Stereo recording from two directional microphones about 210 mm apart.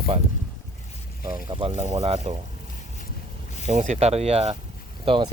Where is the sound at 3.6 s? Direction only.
30° right (ahead or behind).